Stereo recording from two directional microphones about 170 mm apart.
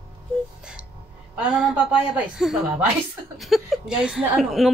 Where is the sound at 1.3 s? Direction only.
5° right (ahead or behind).